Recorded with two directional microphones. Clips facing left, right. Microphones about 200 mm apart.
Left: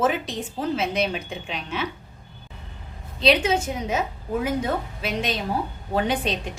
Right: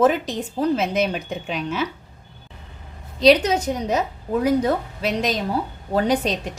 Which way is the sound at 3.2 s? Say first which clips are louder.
Right 5 dB; 40° right (ahead or behind).